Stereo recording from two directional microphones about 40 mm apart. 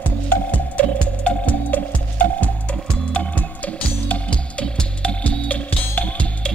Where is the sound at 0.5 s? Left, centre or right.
Left.